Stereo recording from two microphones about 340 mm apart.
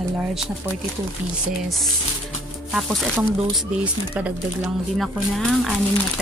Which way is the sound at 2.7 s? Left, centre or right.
Centre.